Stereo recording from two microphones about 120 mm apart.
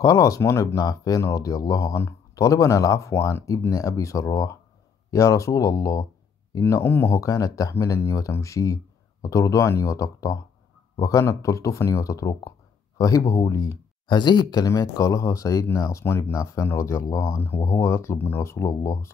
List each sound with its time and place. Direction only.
0.0 s speech: 30° left (ahead or behind)
6.6 s speech: 20° left (ahead or behind)
14.0 s speech: 40° left (ahead or behind)